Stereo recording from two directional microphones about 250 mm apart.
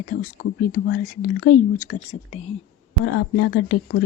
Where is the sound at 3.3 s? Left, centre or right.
Left.